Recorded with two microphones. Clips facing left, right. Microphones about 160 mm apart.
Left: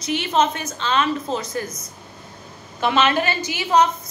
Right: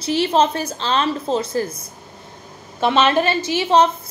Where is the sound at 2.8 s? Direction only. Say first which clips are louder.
Right 3 dB; 30° right (ahead or behind).